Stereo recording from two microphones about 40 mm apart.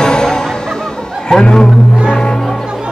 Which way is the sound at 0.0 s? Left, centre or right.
Centre.